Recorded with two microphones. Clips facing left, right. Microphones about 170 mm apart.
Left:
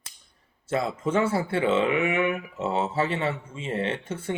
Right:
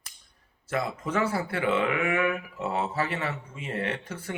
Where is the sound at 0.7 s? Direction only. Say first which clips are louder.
Left 4 dB; 25° left (ahead or behind).